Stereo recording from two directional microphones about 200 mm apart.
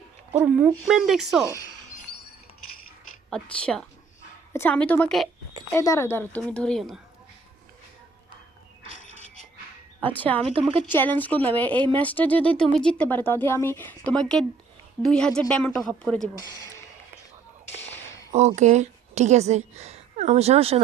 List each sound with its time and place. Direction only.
0.3 s a woman's voice: 5° right (ahead or behind)
3.2 s a woman's voice: 5° left (ahead or behind)
5.7 s a woman's voice: 15° left (ahead or behind)
8.9 s a sound: 40° left (ahead or behind)
10.0 s speech: 10° left (ahead or behind)
10.5 s a woman's voice: 30° right (ahead or behind)
10.8 s a woman's voice: 10° left (ahead or behind)
18.3 s speech: 35° right (ahead or behind)